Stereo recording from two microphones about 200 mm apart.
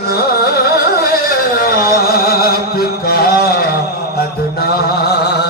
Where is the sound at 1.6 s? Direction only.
50° left (ahead or behind).